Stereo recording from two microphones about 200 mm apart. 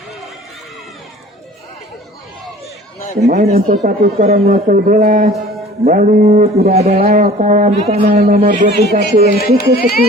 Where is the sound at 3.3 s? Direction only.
40° right (ahead or behind).